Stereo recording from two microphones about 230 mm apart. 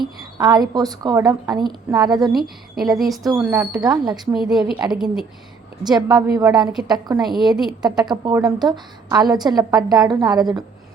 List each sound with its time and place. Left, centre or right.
0.0 s a woman's voice: centre
2.3 s a woman's voice: centre
3.8 s a woman's voice: centre
4.4 s a woman's voice: centre
5.8 s a woman's voice: centre
7.2 s a woman's voice: centre
7.8 s a woman's voice: centre